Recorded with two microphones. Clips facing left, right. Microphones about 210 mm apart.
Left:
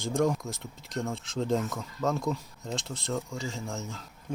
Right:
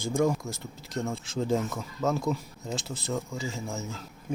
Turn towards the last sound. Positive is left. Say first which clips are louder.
# right 1 dB
turn(degrees=0)  # may be behind; listen again after turning